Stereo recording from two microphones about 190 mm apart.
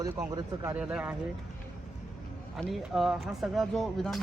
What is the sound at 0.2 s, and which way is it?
Speech, 10° right (ahead or behind).